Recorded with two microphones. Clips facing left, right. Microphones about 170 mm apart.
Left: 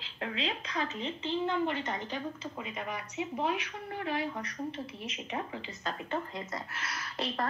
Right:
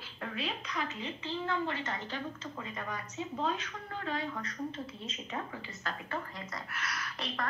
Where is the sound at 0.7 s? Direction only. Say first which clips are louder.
Left 3 dB; 20° left (ahead or behind).